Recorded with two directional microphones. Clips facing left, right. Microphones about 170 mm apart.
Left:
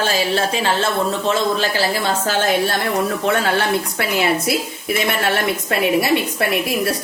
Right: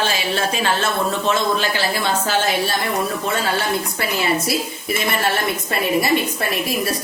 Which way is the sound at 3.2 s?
70° left (ahead or behind).